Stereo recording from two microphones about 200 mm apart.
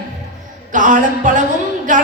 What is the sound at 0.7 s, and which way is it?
Speech, 40° right (ahead or behind).